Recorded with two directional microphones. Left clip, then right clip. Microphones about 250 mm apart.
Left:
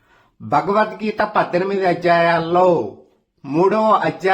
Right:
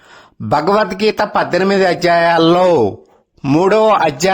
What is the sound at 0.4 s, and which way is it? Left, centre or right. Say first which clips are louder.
A man's voice: right 3 dB; right.